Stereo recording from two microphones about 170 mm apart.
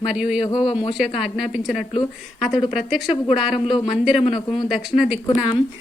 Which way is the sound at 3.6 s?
30° left (ahead or behind).